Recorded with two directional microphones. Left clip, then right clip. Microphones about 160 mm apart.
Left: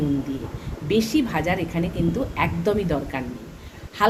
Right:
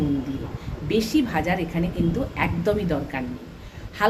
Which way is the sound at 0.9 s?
10° left (ahead or behind).